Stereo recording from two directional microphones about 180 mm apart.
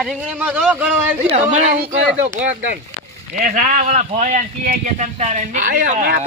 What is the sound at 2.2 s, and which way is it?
Speech, 40° right (ahead or behind).